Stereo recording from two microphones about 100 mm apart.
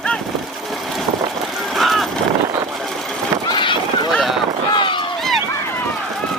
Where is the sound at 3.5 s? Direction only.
55° left (ahead or behind).